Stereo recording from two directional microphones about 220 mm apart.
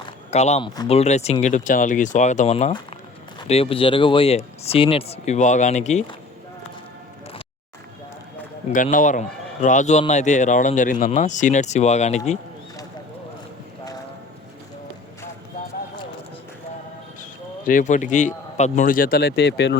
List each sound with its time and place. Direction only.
0.0 s a sound: 30° left (ahead or behind)
0.8 s speech: 30° left (ahead or behind)
8.7 s speech: 35° left (ahead or behind)
17.7 s speech: 35° left (ahead or behind); by 19.7 s 50° left (ahead or behind)